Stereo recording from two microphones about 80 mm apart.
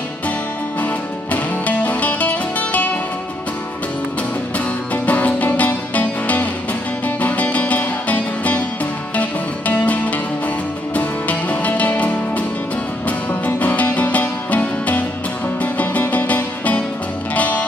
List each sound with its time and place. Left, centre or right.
1.3 s music: centre
4.9 s music: centre